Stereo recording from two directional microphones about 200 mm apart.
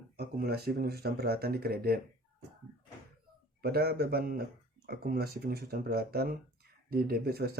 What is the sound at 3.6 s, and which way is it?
Speech, 50° right (ahead or behind).